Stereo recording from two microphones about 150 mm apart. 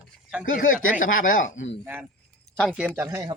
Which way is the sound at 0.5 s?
65° left (ahead or behind).